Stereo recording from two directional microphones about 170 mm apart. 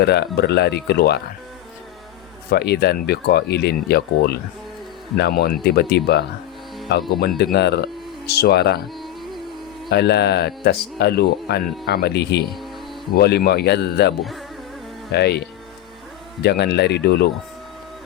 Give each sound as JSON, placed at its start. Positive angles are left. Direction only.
{"t": 0.0, "sound": "speech", "side_deg": 75}
{"t": 2.5, "sound": "speech", "side_deg": 75}
{"t": 9.9, "sound": "speech", "side_deg": 75}
{"t": 15.1, "sound": "speech", "side_deg": 75}